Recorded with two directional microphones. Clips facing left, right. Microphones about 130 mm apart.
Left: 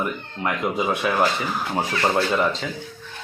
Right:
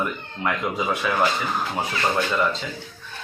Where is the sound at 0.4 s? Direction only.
20° left (ahead or behind).